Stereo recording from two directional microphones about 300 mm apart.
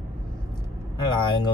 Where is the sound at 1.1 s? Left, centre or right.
Centre.